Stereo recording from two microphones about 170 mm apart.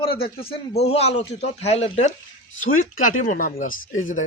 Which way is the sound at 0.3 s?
35° left (ahead or behind).